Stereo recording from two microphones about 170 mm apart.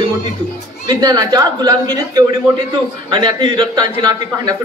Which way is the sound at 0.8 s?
20° right (ahead or behind).